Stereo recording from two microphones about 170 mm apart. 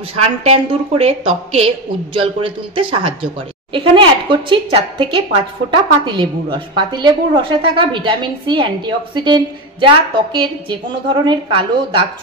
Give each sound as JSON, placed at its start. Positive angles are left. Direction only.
{"t": 0.1, "sound": "a woman's voice", "side_deg": -35}